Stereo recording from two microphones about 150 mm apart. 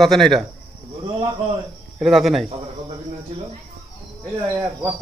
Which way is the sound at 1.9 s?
Centre (ahead or behind).